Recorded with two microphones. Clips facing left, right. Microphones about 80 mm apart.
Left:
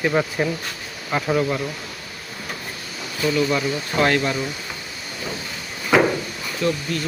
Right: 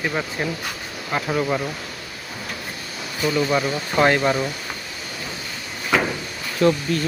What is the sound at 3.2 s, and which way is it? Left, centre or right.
Speech, centre.